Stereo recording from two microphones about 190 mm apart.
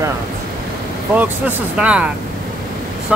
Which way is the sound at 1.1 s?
10° right (ahead or behind).